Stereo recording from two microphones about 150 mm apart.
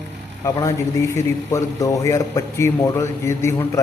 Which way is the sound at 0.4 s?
20° left (ahead or behind).